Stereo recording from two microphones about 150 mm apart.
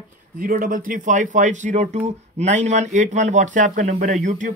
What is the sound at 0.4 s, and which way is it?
Speech, 70° right (ahead or behind).